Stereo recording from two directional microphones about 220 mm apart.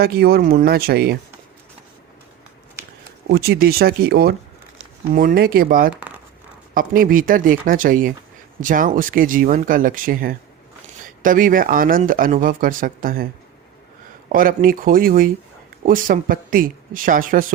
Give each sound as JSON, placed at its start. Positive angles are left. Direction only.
{"t": 0.0, "sound": "speech", "side_deg": -45}
{"t": 3.2, "sound": "speech", "side_deg": -45}
{"t": 14.3, "sound": "speech", "side_deg": -40}